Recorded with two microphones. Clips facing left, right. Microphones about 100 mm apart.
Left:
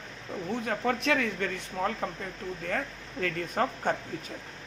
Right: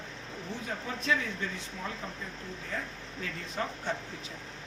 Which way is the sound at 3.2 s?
50° left (ahead or behind).